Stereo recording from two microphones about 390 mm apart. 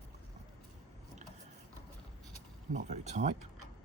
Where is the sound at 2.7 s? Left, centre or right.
Centre.